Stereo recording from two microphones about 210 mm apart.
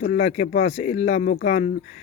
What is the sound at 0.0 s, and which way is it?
Speech, 40° left (ahead or behind).